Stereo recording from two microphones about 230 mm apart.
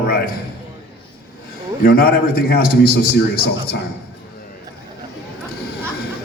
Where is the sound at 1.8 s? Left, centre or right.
Left.